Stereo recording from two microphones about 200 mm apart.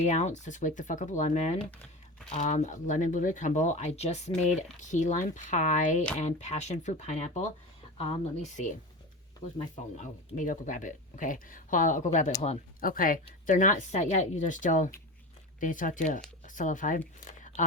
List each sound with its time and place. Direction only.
0.0 s speech: 35° left (ahead or behind)
10.0 s speech: 40° left (ahead or behind)
17.2 s a sound: 40° left (ahead or behind)